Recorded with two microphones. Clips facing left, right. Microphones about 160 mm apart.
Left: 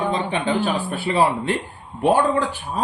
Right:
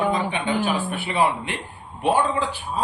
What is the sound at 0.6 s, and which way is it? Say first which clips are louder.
Speech: left 2 dB; 35° left (ahead or behind).